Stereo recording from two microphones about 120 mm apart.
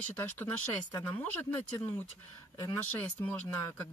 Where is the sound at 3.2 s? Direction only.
15° left (ahead or behind).